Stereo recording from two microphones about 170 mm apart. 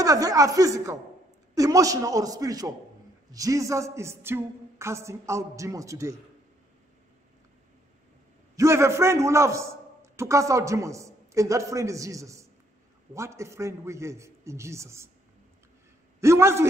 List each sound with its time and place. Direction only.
0.0 s a man's voice: 20° right (ahead or behind)
8.5 s a man's voice: 15° right (ahead or behind)
16.2 s a man's voice: 15° right (ahead or behind)